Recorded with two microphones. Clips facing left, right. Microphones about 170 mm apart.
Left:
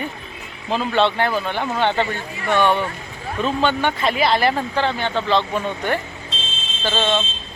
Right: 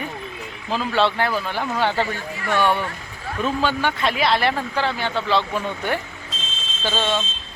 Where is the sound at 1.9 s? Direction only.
20° left (ahead or behind).